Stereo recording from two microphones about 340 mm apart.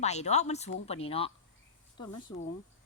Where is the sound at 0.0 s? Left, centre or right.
Centre.